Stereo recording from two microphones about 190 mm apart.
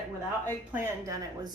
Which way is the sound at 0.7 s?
15° right (ahead or behind).